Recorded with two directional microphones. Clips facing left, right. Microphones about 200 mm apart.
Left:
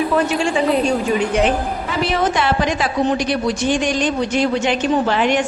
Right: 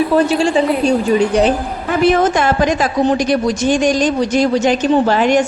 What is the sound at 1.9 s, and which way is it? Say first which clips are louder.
A woman's voice: right 7 dB; 50° right (ahead or behind).